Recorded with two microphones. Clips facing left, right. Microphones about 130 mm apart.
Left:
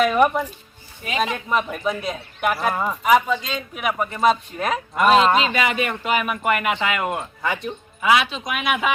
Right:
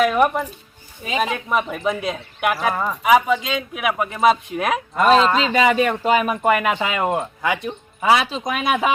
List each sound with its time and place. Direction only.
0.0 s a man's voice: centre (ahead or behind)
3.0 s a man's voice: 5° right (ahead or behind)
5.0 s speech: 10° left (ahead or behind)
5.6 s speech: 30° right (ahead or behind)
7.4 s a man's voice: 10° right (ahead or behind)
8.0 s speech: 35° right (ahead or behind)